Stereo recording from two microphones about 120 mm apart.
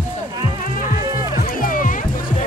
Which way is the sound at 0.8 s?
90° left.